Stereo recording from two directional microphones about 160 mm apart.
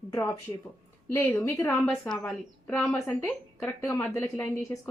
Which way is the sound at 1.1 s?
15° left (ahead or behind).